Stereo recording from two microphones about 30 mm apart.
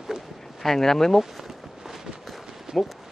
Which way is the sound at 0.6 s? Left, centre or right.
Centre.